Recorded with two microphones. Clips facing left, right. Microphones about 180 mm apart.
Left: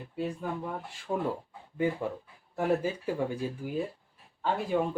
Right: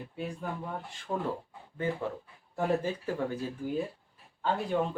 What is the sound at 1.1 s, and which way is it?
Speech, 10° left (ahead or behind).